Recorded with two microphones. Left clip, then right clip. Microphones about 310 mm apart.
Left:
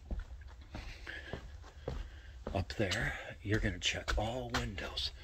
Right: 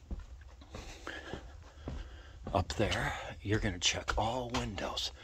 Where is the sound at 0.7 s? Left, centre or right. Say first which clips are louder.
Right 2 dB; right.